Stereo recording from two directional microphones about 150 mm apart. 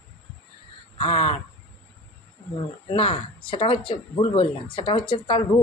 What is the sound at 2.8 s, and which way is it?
A woman's voice, 40° left (ahead or behind).